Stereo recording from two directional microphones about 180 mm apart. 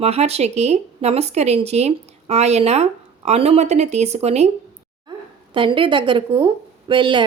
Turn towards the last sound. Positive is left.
turn(degrees=-25)  # may be behind; listen again after turning